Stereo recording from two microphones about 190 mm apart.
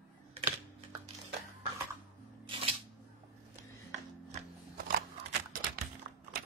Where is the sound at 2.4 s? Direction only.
25° right (ahead or behind).